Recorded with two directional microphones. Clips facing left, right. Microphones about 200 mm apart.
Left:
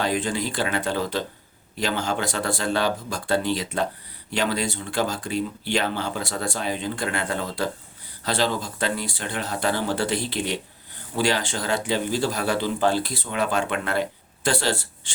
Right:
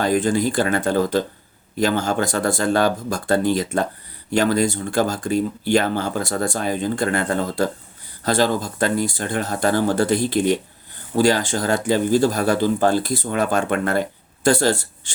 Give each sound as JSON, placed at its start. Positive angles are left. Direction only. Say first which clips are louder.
{"t": 0.0, "sound": "speech", "louder": "right 6 dB", "side_deg": -45}